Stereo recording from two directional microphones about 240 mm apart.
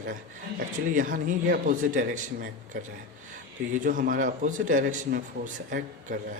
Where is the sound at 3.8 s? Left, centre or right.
Right.